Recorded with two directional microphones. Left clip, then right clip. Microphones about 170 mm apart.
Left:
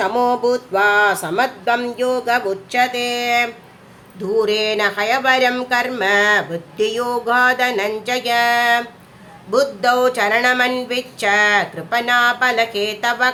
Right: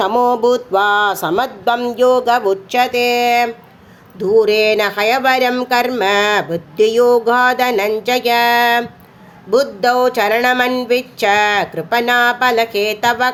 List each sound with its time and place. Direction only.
0.0 s speech: 30° right (ahead or behind)